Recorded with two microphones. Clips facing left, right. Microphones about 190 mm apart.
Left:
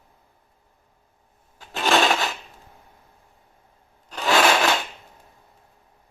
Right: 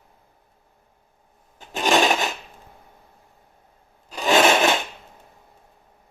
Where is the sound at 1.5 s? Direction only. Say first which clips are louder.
Right 1 dB; 15° right (ahead or behind).